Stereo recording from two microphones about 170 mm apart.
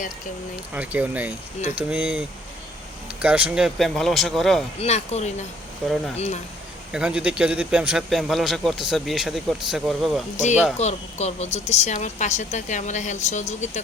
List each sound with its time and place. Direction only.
0.7 s speech: 10° right (ahead or behind)
4.8 s speech: 40° left (ahead or behind)
6.9 s speech: 5° right (ahead or behind)
10.3 s a woman's voice: 45° left (ahead or behind)